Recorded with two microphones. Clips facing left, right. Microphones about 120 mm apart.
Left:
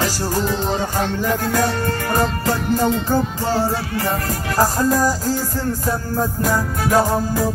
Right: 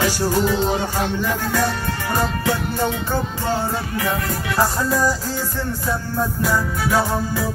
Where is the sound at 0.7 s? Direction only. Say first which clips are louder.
Left 1 dB; 10° right (ahead or behind).